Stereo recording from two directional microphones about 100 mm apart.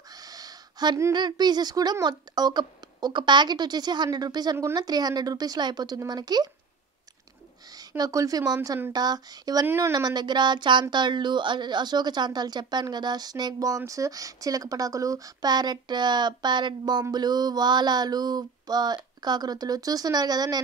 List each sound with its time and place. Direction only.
0.1 s a sound: 40° right (ahead or behind)
1.1 s a woman's voice: 45° right (ahead or behind)
8.0 s a woman's voice: 35° right (ahead or behind)
9.7 s speech: 25° right (ahead or behind)
9.9 s a woman's voice: 45° right (ahead or behind)